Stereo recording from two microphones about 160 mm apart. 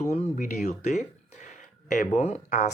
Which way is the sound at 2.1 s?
45° left (ahead or behind).